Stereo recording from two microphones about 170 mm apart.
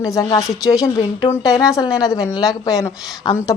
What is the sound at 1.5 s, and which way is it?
Speech, 20° left (ahead or behind).